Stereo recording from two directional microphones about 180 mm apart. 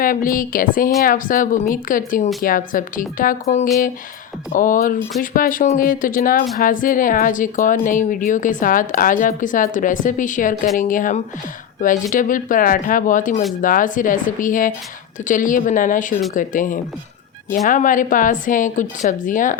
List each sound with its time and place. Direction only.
0.0 s speech: 50° left (ahead or behind)
4.5 s speech: 45° left (ahead or behind)